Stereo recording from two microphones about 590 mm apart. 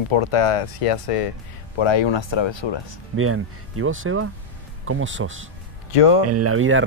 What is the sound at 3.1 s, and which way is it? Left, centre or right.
Speech, right.